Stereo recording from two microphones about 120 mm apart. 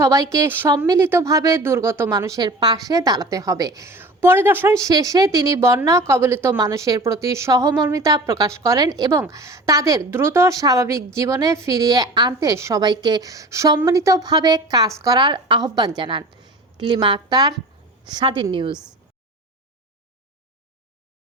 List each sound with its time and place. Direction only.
0.0 s a woman's voice: 25° right (ahead or behind); by 18.8 s 45° right (ahead or behind)